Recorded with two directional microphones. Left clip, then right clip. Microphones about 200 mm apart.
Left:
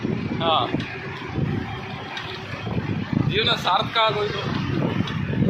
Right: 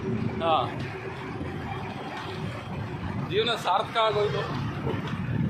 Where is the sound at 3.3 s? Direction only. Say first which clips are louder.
Left 4 dB; 5° left (ahead or behind).